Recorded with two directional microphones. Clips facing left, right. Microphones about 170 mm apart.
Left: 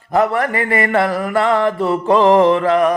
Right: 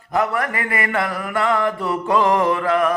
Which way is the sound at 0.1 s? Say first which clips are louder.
Left 5 dB; 30° left (ahead or behind).